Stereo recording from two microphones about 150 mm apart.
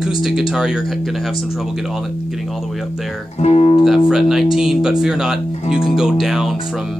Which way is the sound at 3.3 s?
45° left (ahead or behind).